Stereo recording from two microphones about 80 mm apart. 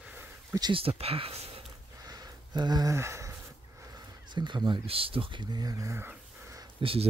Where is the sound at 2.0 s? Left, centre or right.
Right.